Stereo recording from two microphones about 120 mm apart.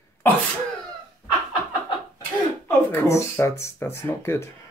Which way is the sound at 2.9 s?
20° left (ahead or behind).